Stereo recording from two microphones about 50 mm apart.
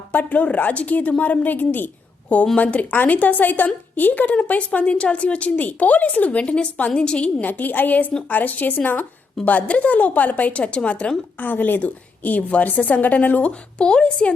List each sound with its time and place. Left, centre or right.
0.1 s a woman's voice: left
2.6 s a woman's voice: left
7.4 s a woman's voice: left
11.3 s a woman's voice: left
12.6 s a woman's voice: left